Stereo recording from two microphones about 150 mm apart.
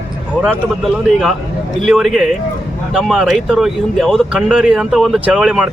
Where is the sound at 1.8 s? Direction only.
Centre (ahead or behind).